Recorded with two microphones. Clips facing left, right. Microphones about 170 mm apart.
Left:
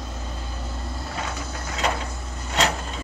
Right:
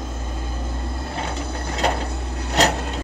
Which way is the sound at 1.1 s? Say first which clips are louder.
Right 4 dB; 30° right (ahead or behind).